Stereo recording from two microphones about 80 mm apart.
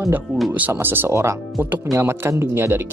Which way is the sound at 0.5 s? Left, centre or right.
Right.